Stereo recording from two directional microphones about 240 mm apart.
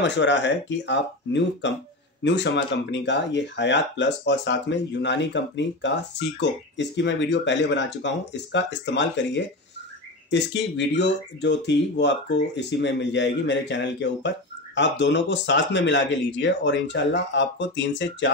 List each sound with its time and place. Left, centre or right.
0.0 s speech: left